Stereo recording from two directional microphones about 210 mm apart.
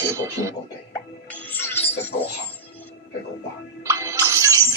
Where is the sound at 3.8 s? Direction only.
15° right (ahead or behind).